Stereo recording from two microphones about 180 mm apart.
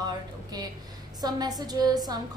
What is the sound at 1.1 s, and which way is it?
Speech, 20° right (ahead or behind).